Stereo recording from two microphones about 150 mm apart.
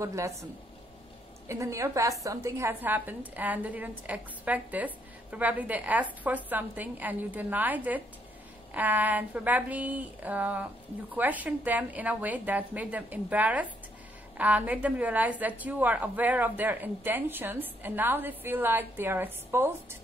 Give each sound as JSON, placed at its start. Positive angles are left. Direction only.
{"t": 0.0, "sound": "a woman's voice", "side_deg": -20}
{"t": 1.5, "sound": "a woman's voice", "side_deg": -20}